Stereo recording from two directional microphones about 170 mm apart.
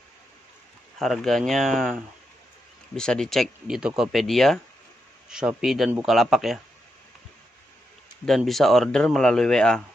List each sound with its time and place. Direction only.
0.9 s speech: centre (ahead or behind)
8.3 s speech: centre (ahead or behind)